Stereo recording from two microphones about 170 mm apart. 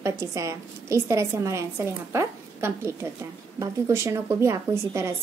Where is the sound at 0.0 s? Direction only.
20° right (ahead or behind).